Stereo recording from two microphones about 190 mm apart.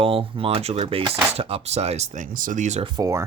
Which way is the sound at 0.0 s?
30° right (ahead or behind).